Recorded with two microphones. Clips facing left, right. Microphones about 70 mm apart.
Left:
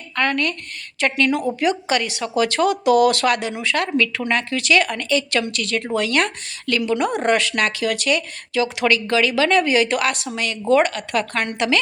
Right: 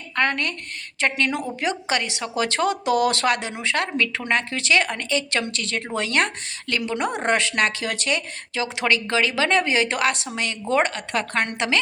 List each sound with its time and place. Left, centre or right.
0.2 s speech: right